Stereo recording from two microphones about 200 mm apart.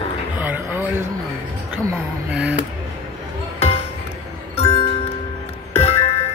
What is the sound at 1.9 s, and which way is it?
Speech, 5° right (ahead or behind).